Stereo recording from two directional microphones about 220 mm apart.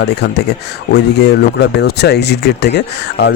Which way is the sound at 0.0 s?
50° left (ahead or behind).